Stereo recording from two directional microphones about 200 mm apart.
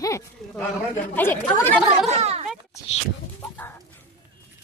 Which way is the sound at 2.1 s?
30° right (ahead or behind).